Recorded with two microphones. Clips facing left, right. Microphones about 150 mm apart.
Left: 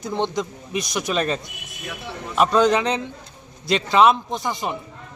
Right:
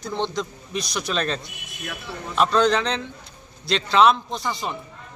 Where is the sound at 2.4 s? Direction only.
15° left (ahead or behind).